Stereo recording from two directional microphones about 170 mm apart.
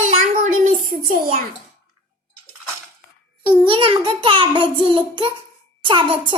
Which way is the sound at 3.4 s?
30° right (ahead or behind).